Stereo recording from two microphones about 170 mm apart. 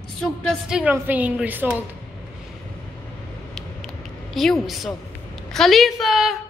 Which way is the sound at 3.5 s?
Centre (ahead or behind).